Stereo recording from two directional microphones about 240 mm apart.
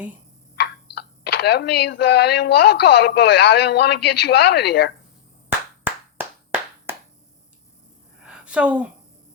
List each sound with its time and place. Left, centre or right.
0.5 s speech: left
5.8 s clapping: centre
8.2 s a sound: centre